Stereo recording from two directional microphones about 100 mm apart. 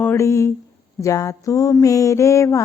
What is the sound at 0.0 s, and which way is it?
A woman's voice, 25° left (ahead or behind).